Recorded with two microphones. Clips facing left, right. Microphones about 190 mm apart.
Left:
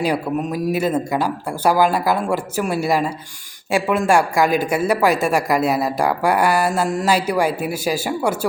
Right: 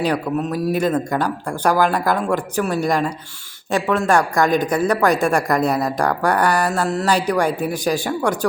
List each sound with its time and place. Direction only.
0.0 s speech: 10° left (ahead or behind)